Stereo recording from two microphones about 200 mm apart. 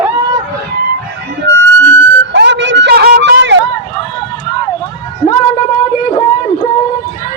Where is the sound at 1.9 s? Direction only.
60° right (ahead or behind).